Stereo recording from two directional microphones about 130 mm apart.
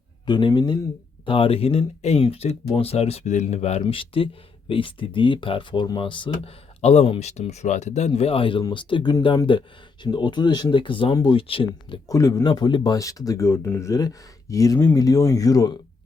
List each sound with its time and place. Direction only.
0.3 s speech: 35° left (ahead or behind)
6.8 s speech: 50° left (ahead or behind)
11.1 s speech: 30° left (ahead or behind)
11.3 s speech: 45° left (ahead or behind)
12.0 s speech: 25° left (ahead or behind)